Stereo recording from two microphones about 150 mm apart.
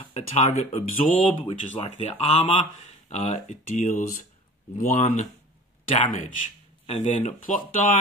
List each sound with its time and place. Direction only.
0.0 s speech: 45° left (ahead or behind)
1.2 s speech: 40° left (ahead or behind); by 8.0 s 60° left (ahead or behind)